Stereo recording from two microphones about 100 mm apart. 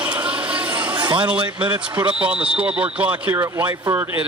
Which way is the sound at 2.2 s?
15° right (ahead or behind).